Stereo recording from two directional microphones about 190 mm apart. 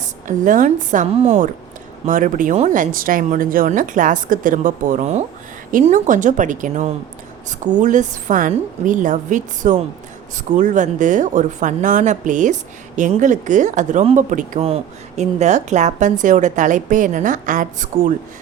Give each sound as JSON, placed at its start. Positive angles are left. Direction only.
{"t": 0.0, "sound": "speech", "side_deg": -40}